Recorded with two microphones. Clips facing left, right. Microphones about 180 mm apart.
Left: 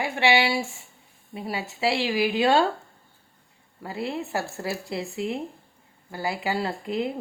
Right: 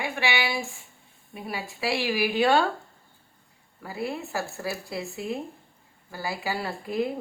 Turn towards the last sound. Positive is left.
turn(degrees=20)  # may be behind; listen again after turning